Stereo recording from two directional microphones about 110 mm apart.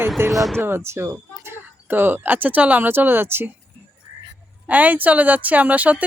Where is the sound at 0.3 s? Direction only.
Centre (ahead or behind).